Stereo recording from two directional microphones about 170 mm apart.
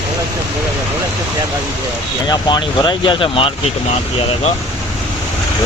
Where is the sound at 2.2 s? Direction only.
25° left (ahead or behind).